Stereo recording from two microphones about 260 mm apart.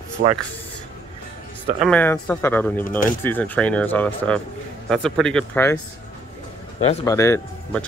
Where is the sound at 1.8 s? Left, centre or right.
Centre.